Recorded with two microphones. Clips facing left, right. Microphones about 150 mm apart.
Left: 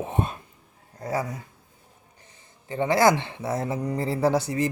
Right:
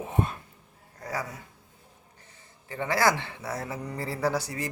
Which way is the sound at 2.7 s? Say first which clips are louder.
Left 5 dB; 20° left (ahead or behind).